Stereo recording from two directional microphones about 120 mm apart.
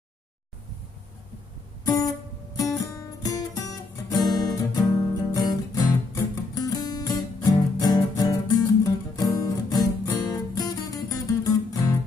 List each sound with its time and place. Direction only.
1.9 s music: 30° left (ahead or behind)